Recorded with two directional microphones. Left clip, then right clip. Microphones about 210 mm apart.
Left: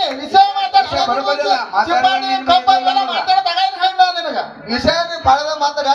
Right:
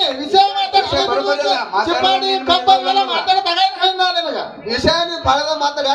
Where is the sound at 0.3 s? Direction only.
45° right (ahead or behind).